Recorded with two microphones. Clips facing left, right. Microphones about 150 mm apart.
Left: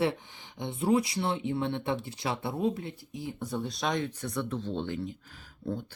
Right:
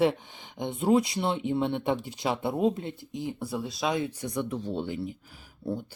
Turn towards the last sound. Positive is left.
turn(degrees=-35)  # may be behind; listen again after turning